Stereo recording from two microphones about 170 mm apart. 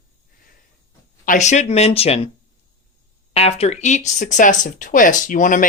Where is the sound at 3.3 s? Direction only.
35° left (ahead or behind).